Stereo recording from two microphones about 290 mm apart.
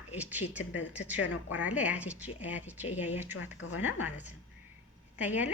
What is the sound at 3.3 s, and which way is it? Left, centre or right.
Speech, left.